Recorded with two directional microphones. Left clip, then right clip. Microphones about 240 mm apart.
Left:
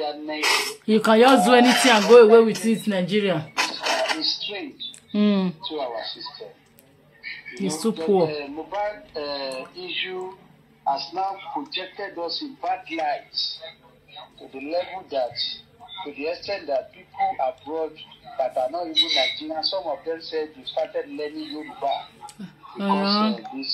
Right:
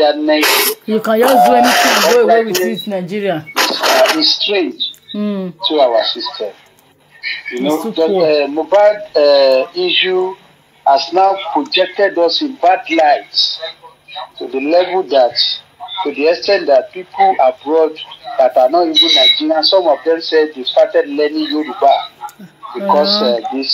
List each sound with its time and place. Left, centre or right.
0.0 s speech: right
0.8 s speech: centre
1.6 s speech: right
2.9 s speech: centre
3.5 s cash register: right
5.1 s speech: centre
5.6 s speech: right